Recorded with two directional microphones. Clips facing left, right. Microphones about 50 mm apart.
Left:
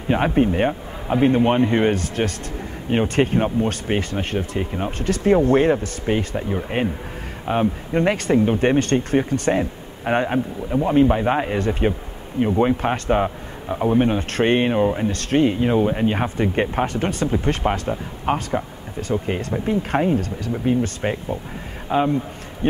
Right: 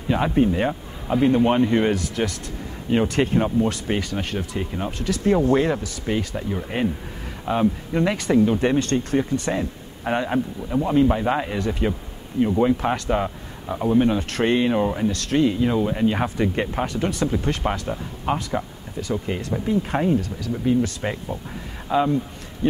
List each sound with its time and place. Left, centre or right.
0.1 s a man's voice: left
2.0 s speech: left
2.9 s a man's voice: left
4.9 s a man's voice: left
8.7 s speech: left
9.5 s speech: left
10.7 s speech: centre
11.0 s a man's voice: left
14.7 s speech: centre
15.0 s a man's voice: left
16.8 s speech: left
17.6 s speech: centre
18.3 s a man's voice: left